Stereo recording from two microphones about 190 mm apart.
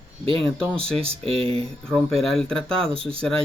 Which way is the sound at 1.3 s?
30° right (ahead or behind).